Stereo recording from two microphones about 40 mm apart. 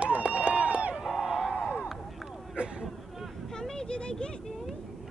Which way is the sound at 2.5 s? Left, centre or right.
Right.